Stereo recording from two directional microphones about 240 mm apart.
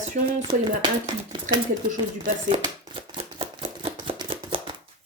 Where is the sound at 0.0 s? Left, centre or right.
Right.